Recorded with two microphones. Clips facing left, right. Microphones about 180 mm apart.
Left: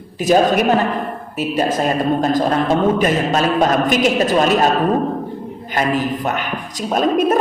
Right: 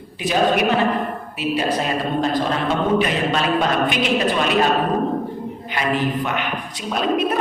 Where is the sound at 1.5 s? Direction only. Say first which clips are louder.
Left 5 dB; 45° left (ahead or behind).